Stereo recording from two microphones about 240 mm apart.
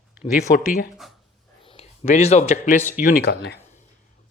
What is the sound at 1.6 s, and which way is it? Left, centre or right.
Speech, left.